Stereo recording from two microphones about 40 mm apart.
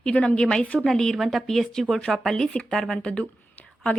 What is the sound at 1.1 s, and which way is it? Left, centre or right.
Speech, centre.